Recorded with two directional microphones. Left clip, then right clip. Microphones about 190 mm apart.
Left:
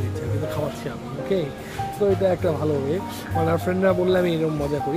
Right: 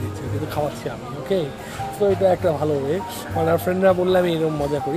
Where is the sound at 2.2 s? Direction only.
15° left (ahead or behind).